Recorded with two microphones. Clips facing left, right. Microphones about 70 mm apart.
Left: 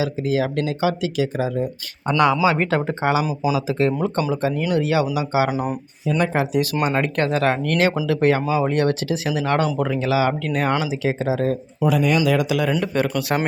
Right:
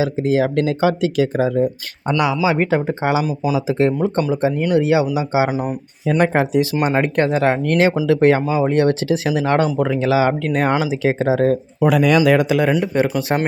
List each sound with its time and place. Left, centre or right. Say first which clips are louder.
0.0 s speech: right 4 dB; right
2.0 s speech: even; centre
3.2 s speech: right 2 dB; centre
3.7 s speech: right 3 dB; right
5.5 s speech: right 2 dB; centre
6.1 s speech: right 4 dB; right
6.8 s speech: right 4 dB; right
7.6 s speech: right 4 dB; right
11.9 s speech: right 4 dB; right
12.2 s speech: right 5 dB; right
12.8 s speech: right 3 dB; centre